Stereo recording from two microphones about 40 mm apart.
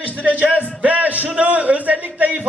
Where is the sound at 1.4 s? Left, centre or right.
Right.